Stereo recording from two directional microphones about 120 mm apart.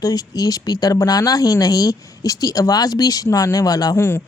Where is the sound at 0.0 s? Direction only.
30° left (ahead or behind).